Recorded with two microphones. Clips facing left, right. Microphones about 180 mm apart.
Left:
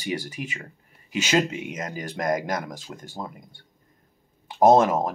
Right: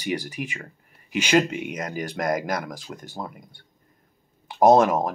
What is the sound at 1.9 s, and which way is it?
Speech, 25° left (ahead or behind).